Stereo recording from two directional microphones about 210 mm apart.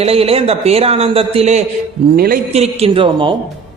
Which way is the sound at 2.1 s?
45° right (ahead or behind).